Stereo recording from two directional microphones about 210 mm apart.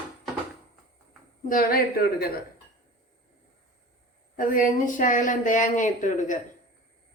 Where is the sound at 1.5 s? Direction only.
45° left (ahead or behind).